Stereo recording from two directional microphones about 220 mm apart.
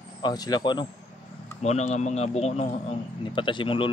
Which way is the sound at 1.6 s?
30° left (ahead or behind).